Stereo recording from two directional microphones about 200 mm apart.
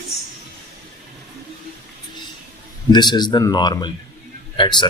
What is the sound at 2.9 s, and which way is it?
Speech, 20° left (ahead or behind).